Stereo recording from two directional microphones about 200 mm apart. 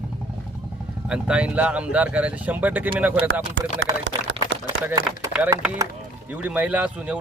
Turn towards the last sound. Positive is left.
turn(degrees=-5)  # may be behind; listen again after turning